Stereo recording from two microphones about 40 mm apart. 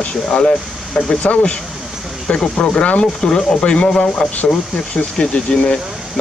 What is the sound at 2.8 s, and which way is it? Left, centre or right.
Speech, left.